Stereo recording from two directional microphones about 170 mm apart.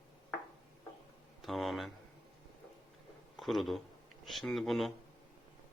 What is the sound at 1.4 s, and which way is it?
Speech, centre (ahead or behind).